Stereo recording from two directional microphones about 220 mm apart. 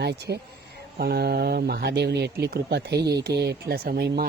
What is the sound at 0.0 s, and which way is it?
Speech, 50° right (ahead or behind).